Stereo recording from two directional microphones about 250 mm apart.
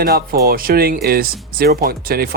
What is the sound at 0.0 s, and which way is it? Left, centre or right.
Speech, right.